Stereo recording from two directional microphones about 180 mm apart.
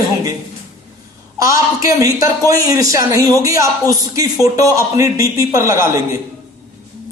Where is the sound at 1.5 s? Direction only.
15° right (ahead or behind).